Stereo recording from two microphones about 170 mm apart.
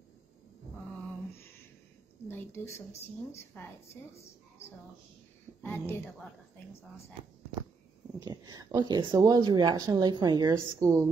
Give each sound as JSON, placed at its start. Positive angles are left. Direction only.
{"t": 2.2, "sound": "a woman's voice", "side_deg": 15}
{"t": 5.6, "sound": "a woman's voice", "side_deg": 15}
{"t": 6.0, "sound": "a woman's voice", "side_deg": 5}
{"t": 8.2, "sound": "speech", "side_deg": -20}